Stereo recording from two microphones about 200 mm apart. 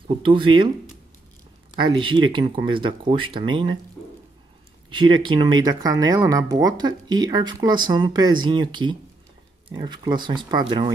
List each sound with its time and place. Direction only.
0.1 s speech: 25° right (ahead or behind)
1.8 s speech: 25° right (ahead or behind)
4.9 s speech: 25° right (ahead or behind)